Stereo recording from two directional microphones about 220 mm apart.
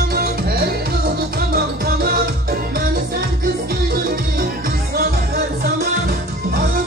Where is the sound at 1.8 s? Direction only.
45° right (ahead or behind).